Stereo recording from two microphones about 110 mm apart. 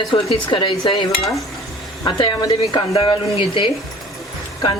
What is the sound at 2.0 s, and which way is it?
Speech, 45° left (ahead or behind).